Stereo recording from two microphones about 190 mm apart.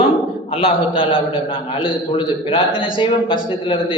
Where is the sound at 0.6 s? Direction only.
25° left (ahead or behind).